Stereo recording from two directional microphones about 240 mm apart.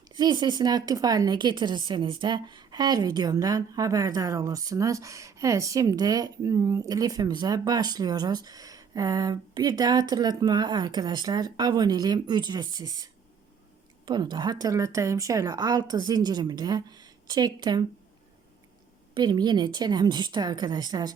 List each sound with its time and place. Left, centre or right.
0.1 s a woman's voice: centre
19.1 s a woman's voice: centre